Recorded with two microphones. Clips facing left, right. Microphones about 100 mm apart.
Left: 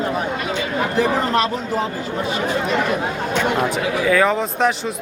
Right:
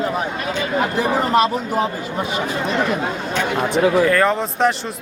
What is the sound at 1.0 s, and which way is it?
Speech, 10° right (ahead or behind).